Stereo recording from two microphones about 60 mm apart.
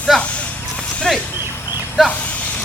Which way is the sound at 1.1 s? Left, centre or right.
Centre.